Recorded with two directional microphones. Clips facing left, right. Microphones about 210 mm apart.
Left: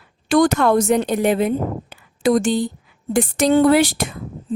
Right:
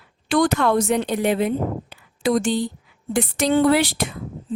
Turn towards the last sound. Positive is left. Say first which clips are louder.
# left 3 dB
turn(degrees=45)  # may be behind; listen again after turning